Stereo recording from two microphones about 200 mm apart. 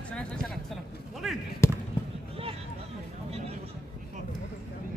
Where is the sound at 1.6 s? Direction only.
15° left (ahead or behind).